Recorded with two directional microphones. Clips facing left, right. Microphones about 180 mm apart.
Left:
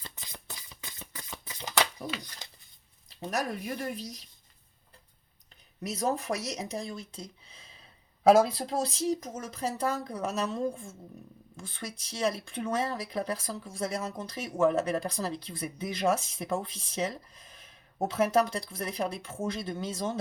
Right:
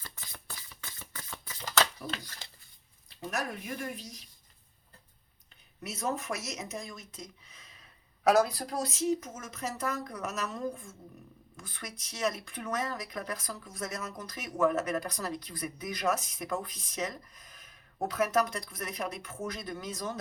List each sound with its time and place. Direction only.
0.0 s a sound: 20° left (ahead or behind)
3.2 s speech: 35° left (ahead or behind)
5.8 s speech: 35° left (ahead or behind)